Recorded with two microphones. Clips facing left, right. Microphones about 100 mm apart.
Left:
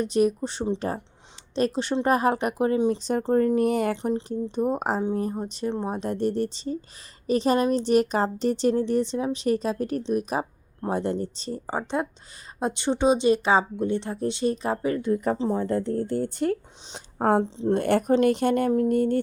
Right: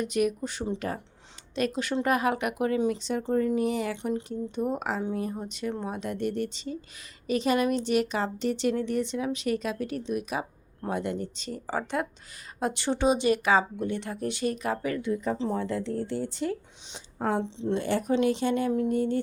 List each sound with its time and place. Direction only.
0.0 s a woman's voice: 30° left (ahead or behind)
3.0 s speech: 40° left (ahead or behind)
3.9 s a woman's voice: 35° left (ahead or behind)
15.1 s speech: 55° left (ahead or behind)
15.4 s speech: 40° left (ahead or behind)